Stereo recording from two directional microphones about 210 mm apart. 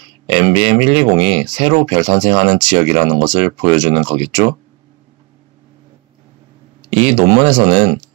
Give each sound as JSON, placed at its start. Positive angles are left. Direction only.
{"t": 0.3, "sound": "speech", "side_deg": -20}
{"t": 6.9, "sound": "speech", "side_deg": -20}